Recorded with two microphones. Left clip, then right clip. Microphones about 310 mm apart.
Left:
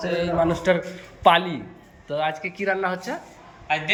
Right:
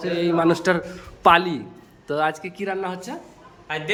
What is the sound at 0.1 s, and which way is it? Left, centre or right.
A man's voice, centre.